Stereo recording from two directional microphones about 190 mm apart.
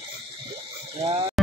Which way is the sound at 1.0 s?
30° right (ahead or behind).